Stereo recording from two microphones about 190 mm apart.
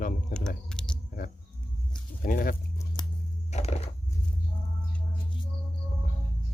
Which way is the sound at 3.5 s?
35° left (ahead or behind).